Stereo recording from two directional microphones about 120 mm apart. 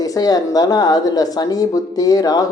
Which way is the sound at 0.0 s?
30° left (ahead or behind).